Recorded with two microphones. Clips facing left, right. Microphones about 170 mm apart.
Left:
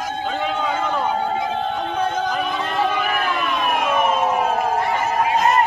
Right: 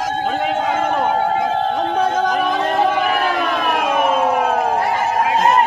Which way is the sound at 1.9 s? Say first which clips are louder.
Right 4 dB; 90° right.